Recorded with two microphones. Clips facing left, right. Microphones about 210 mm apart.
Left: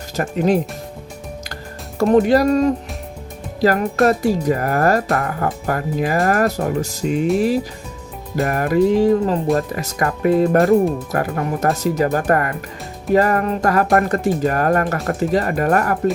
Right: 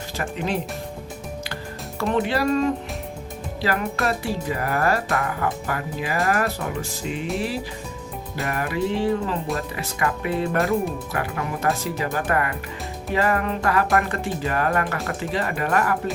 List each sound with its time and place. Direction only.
0.2 s speech: 45° left (ahead or behind)
2.0 s music: 40° left (ahead or behind)
3.6 s speech: 45° left (ahead or behind)
8.4 s music: 45° left (ahead or behind)
9.6 s speech: 40° left (ahead or behind)